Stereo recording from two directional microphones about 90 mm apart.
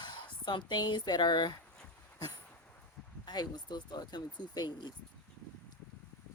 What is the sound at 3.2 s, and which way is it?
Speech, 50° left (ahead or behind).